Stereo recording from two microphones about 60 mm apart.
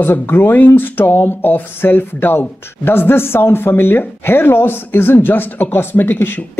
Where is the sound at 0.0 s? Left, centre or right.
Left.